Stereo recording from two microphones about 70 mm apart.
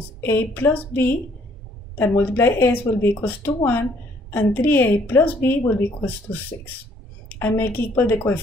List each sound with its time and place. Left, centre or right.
0.2 s speech: left